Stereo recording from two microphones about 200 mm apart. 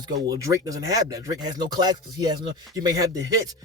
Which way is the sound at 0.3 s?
15° right (ahead or behind).